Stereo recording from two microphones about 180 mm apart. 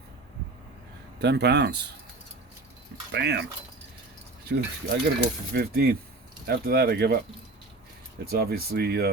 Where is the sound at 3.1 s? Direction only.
70° right (ahead or behind).